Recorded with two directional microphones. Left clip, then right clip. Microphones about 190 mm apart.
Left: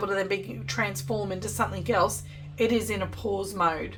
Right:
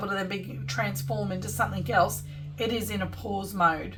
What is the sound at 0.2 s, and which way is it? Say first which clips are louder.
A woman's voice: left 4 dB; 20° left (ahead or behind).